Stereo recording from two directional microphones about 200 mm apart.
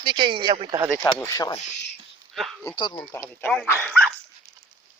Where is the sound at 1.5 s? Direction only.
35° left (ahead or behind).